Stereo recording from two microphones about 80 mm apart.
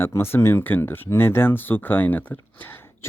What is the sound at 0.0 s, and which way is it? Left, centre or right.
Speech, left.